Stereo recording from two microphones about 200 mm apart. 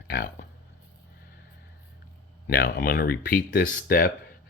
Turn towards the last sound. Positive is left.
turn(degrees=45)  # may be behind; listen again after turning